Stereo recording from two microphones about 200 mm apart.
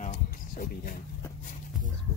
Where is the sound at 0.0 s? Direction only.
45° left (ahead or behind).